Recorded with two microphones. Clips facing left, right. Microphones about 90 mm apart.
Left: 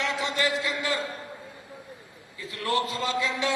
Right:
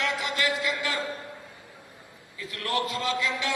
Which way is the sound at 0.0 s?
30° left (ahead or behind).